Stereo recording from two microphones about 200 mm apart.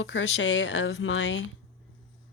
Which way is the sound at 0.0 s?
70° left (ahead or behind).